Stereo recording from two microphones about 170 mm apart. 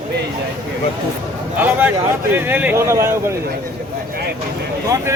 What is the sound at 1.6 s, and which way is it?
Speech, 10° right (ahead or behind).